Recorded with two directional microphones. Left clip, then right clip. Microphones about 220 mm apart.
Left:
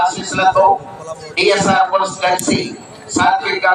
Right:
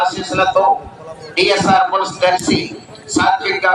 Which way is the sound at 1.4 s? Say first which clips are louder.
Even; 40° right (ahead or behind).